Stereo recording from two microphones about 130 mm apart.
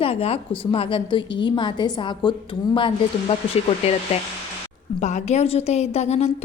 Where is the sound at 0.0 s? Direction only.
45° left (ahead or behind).